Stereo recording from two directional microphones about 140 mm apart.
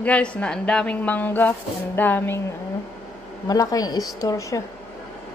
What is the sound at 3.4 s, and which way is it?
A woman's voice, 25° left (ahead or behind).